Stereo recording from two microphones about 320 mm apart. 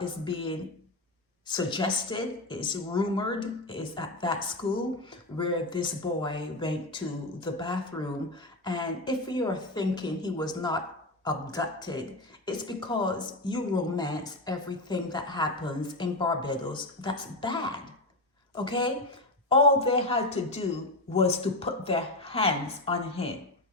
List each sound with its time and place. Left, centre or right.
0.0 s speech: centre